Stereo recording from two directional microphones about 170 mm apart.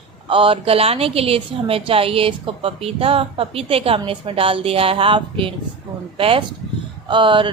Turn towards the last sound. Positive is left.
turn(degrees=-30)  # may be behind; listen again after turning